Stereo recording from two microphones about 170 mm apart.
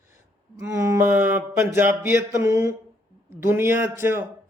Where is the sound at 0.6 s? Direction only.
15° right (ahead or behind).